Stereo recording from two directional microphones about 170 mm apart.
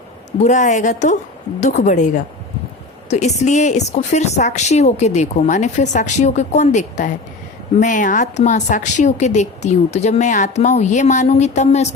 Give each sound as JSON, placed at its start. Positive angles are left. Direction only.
{"t": 0.4, "sound": "a woman's voice", "side_deg": 45}